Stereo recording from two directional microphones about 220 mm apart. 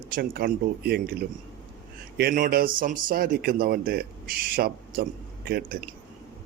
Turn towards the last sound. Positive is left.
turn(degrees=-45)  # may be behind; listen again after turning